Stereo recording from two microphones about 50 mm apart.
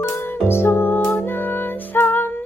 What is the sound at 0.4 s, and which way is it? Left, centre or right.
Music, left.